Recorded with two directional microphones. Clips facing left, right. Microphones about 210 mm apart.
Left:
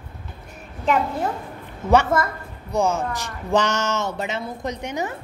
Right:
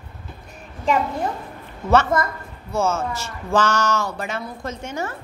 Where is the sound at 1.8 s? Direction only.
15° left (ahead or behind).